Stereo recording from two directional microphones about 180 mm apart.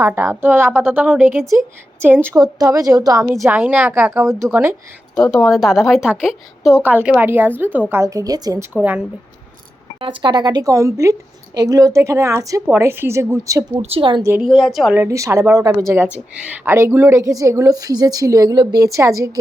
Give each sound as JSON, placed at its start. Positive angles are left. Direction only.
{"t": 0.0, "sound": "a woman's voice", "side_deg": -15}
{"t": 5.1, "sound": "a woman's voice", "side_deg": 5}
{"t": 8.7, "sound": "a woman's voice", "side_deg": -10}
{"t": 10.0, "sound": "a woman's voice", "side_deg": -25}
{"t": 13.8, "sound": "a woman's voice", "side_deg": -30}
{"t": 14.4, "sound": "a woman's voice", "side_deg": 0}
{"t": 14.9, "sound": "a woman's voice", "side_deg": -15}